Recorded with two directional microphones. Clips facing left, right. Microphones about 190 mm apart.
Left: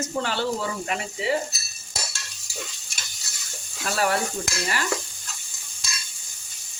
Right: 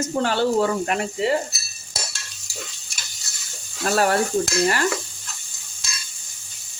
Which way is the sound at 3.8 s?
45° right (ahead or behind).